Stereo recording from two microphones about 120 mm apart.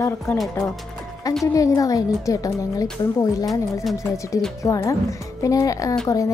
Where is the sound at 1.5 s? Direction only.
30° left (ahead or behind).